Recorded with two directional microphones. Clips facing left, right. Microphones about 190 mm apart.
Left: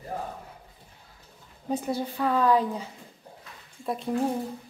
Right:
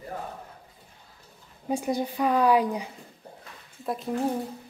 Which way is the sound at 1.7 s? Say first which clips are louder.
Right 2 dB; 15° right (ahead or behind).